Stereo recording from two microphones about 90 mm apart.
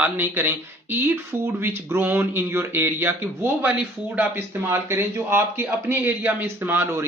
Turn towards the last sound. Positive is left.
turn(degrees=-25)  # may be behind; listen again after turning